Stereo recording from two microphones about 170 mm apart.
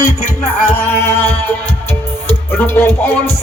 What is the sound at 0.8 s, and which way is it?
Music, 15° left (ahead or behind).